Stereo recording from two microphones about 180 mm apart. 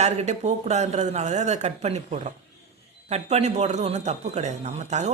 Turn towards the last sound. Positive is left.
turn(degrees=-40)  # may be behind; listen again after turning